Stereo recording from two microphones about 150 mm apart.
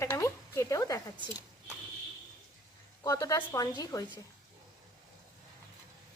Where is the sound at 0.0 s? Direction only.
20° left (ahead or behind).